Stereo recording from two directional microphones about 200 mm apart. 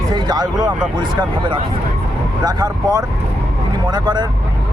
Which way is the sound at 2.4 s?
20° right (ahead or behind).